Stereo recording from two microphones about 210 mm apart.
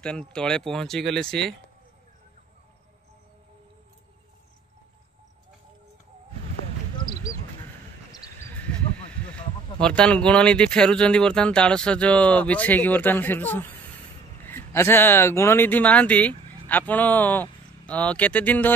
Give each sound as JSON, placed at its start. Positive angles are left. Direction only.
{"t": 0.0, "sound": "speech", "side_deg": 5}
{"t": 8.1, "sound": "a sound", "side_deg": 20}
{"t": 8.5, "sound": "speech", "side_deg": 5}